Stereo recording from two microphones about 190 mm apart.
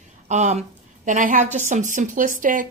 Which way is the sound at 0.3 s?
35° right (ahead or behind).